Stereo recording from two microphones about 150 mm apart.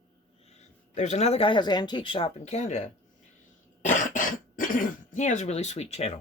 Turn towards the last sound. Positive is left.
turn(degrees=45)  # may be behind; listen again after turning